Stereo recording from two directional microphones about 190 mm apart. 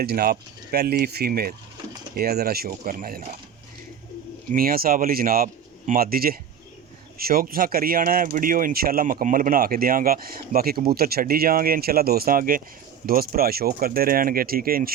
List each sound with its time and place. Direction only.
0.0 s speech: 55° right (ahead or behind)
4.5 s speech: 50° right (ahead or behind)